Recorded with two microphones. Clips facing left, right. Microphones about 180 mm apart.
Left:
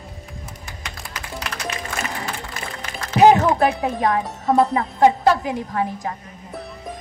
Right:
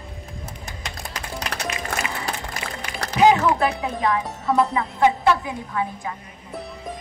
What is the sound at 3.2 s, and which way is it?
Music, 40° left (ahead or behind).